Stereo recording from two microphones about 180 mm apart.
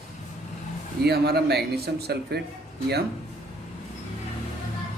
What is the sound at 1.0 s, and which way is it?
Speech, 60° right (ahead or behind).